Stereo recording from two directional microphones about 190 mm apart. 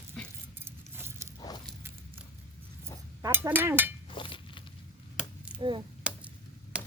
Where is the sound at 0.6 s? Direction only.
10° right (ahead or behind).